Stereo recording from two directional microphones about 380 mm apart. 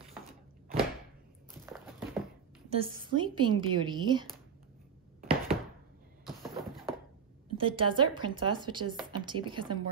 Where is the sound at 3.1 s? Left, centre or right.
Centre.